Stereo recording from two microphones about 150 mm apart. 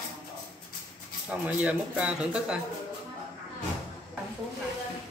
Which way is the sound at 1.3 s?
10° right (ahead or behind).